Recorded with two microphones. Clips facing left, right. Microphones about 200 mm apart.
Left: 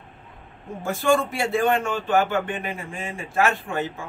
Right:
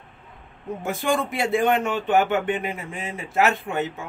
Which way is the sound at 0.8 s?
20° right (ahead or behind).